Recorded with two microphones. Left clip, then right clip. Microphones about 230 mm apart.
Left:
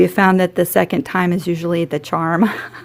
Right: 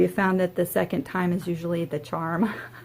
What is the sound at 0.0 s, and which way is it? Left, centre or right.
Speech, left.